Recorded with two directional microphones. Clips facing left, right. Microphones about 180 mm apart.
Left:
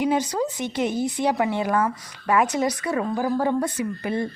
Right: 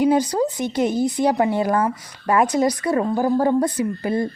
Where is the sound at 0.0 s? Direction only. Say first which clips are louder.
Right 5 dB; 35° right (ahead or behind).